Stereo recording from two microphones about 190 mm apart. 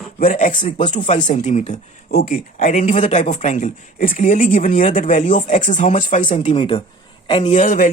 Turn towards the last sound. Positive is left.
turn(degrees=45)  # may be behind; listen again after turning